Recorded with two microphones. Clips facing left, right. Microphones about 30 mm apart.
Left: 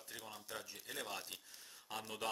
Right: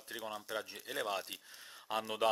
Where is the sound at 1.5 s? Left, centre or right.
Right.